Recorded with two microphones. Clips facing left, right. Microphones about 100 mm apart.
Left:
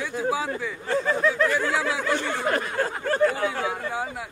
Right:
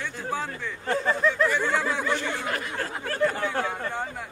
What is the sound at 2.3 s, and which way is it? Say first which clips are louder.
Speech: left 5 dB; 40° left (ahead or behind).